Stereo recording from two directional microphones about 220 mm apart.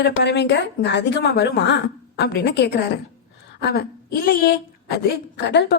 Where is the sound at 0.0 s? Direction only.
50° left (ahead or behind).